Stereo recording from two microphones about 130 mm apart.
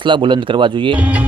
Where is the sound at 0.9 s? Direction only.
10° right (ahead or behind).